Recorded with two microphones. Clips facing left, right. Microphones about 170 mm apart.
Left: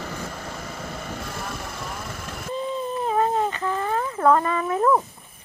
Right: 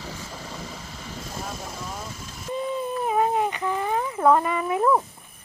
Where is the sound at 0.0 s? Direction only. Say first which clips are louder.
Left 4 dB; 55° left (ahead or behind).